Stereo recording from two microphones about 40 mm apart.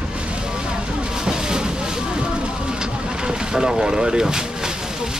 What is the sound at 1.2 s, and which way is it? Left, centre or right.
Vehicle, centre.